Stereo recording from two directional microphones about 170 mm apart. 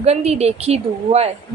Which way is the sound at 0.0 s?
40° right (ahead or behind).